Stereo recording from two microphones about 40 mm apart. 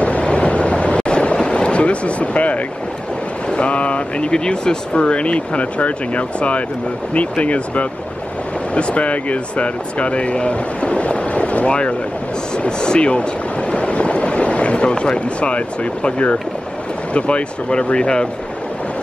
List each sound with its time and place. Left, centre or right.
0.0 s vehicle: left
3.4 s speech: left
4.3 s speech: left